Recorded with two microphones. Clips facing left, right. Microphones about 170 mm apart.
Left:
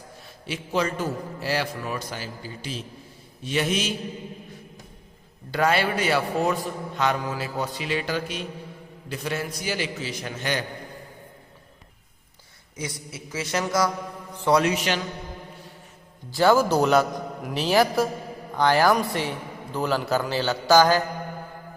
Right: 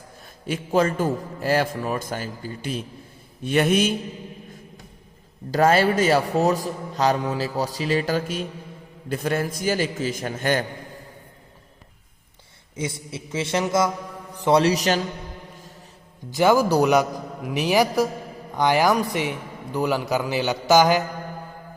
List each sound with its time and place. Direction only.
0.4 s a man's voice: 50° right (ahead or behind)
5.5 s a man's voice: 40° right (ahead or behind)
12.7 s a man's voice: 25° right (ahead or behind)
16.3 s a man's voice: 15° right (ahead or behind)